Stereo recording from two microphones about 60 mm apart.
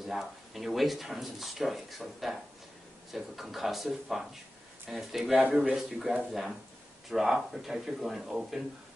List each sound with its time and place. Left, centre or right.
0.0 s speech: centre
5.3 s speech: right
5.8 s speech: centre